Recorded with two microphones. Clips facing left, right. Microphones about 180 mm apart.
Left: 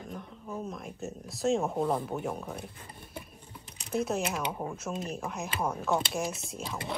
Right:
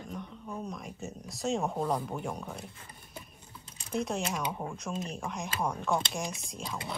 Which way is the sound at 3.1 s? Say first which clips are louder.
Left 3 dB; 25° left (ahead or behind).